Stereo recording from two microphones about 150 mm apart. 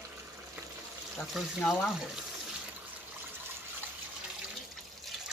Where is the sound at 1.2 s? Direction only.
Centre (ahead or behind).